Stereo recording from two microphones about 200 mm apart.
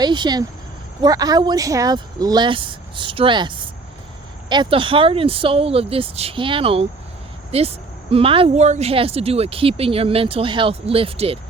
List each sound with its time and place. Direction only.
0.0 s speech: 20° right (ahead or behind)